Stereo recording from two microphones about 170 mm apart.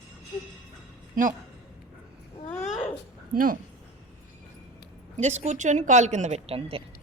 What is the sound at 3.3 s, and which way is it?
Speech, 55° right (ahead or behind).